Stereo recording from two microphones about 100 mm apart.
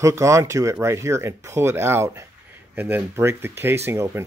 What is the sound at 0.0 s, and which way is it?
Speech, 30° right (ahead or behind).